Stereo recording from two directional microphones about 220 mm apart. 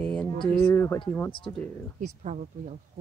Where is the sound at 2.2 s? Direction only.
30° right (ahead or behind).